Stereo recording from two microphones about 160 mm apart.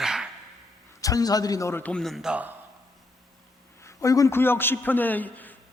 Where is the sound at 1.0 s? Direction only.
20° left (ahead or behind); by 2.5 s 10° right (ahead or behind).